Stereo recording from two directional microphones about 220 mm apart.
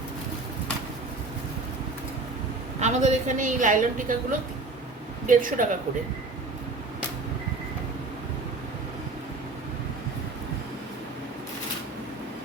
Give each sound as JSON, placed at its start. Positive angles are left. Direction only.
{"t": 2.8, "sound": "a woman's voice", "side_deg": -35}